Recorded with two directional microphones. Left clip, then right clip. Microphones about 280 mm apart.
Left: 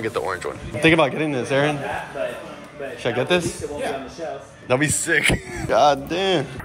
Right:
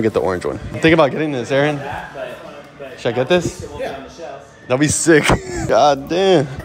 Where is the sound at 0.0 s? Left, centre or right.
Centre.